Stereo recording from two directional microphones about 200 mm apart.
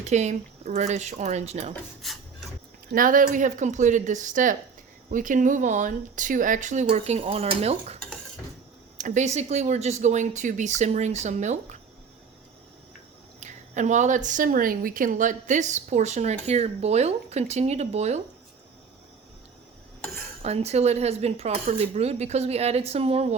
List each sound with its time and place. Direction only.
0.0 s speech: 35° right (ahead or behind)
1.7 s speech: centre (ahead or behind)
2.9 s speech: 45° right (ahead or behind)
9.0 s speech: 35° right (ahead or behind)
13.4 s speech: 35° right (ahead or behind)
20.4 s speech: 30° right (ahead or behind)